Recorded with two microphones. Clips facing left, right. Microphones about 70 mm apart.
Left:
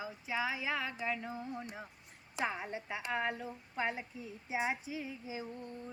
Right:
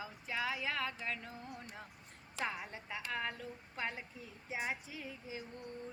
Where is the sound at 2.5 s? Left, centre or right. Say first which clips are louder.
Left 4 dB; centre.